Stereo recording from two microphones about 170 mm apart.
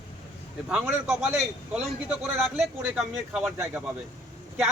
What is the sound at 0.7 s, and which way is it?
A man's voice, 10° right (ahead or behind).